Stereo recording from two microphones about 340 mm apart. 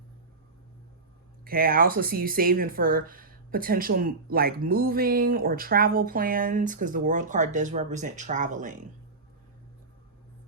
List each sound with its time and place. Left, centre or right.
1.5 s speech: right